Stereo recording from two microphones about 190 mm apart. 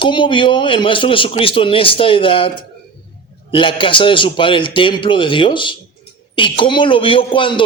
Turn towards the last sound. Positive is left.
turn(degrees=25)  # may be behind; listen again after turning